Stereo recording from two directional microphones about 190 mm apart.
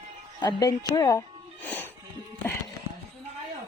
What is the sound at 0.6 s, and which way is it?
Music, 20° left (ahead or behind).